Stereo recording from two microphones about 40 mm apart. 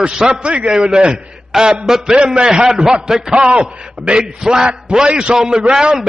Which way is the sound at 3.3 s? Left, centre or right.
Right.